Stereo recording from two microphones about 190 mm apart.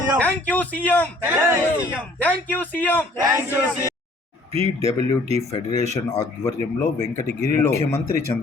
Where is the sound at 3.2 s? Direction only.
15° right (ahead or behind).